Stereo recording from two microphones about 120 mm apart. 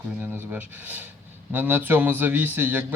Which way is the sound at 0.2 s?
15° right (ahead or behind).